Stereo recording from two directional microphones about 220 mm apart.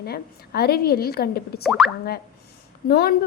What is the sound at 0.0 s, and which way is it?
A woman's voice, 45° left (ahead or behind).